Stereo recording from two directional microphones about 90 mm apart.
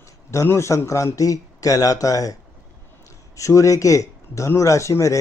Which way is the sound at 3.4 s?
35° left (ahead or behind).